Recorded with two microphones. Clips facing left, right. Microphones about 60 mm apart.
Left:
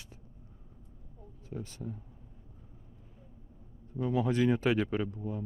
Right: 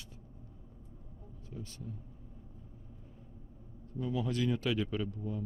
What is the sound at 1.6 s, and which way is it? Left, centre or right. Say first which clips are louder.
Speech: left 2 dB; left.